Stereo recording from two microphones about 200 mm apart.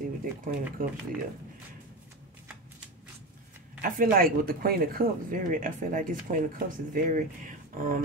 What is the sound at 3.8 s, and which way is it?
Speech, 45° right (ahead or behind).